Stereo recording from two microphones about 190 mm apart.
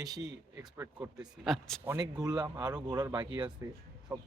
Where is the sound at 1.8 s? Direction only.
20° right (ahead or behind).